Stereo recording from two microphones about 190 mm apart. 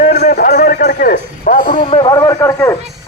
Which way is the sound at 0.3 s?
55° left (ahead or behind).